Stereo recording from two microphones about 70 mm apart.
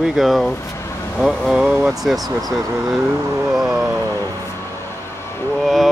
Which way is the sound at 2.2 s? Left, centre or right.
Right.